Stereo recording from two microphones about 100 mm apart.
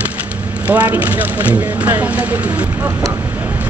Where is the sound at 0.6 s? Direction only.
15° right (ahead or behind).